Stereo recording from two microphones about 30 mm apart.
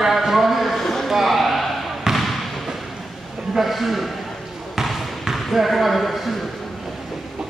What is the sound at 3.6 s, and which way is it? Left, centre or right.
Speech, centre.